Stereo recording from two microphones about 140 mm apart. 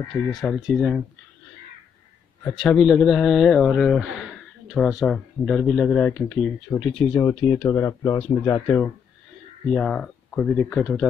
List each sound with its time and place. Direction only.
0.1 s speech: centre (ahead or behind)
2.5 s speech: centre (ahead or behind)
7.2 s speech: 20° left (ahead or behind)
7.5 s speech: 10° left (ahead or behind)
7.8 s speech: 25° left (ahead or behind)
9.7 s speech: 5° left (ahead or behind)